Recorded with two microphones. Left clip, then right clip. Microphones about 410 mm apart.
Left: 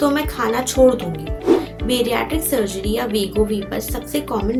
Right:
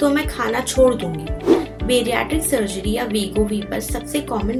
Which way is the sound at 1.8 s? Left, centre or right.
Left.